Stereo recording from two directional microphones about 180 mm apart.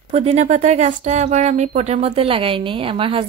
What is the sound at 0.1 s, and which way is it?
Speech, 35° right (ahead or behind).